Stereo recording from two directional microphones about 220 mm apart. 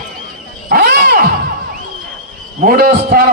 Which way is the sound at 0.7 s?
40° right (ahead or behind).